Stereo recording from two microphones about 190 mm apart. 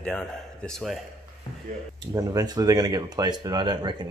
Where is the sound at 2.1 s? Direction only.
20° right (ahead or behind).